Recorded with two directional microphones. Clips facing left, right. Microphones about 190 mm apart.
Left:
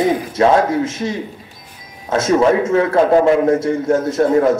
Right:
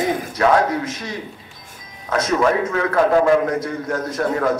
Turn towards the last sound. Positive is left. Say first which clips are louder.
# left 7 dB
turn(degrees=25)  # may be behind; listen again after turning